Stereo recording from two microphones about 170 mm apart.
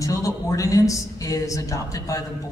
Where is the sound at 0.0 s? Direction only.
20° left (ahead or behind).